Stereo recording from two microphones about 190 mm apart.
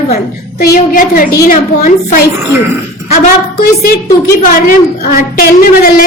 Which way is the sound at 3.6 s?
50° left (ahead or behind).